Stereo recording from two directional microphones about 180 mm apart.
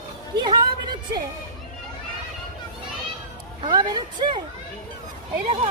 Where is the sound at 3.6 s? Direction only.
25° right (ahead or behind).